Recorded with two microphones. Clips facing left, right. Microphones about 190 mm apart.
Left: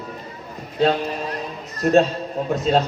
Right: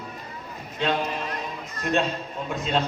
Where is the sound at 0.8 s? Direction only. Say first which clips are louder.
Left 6 dB; 35° left (ahead or behind).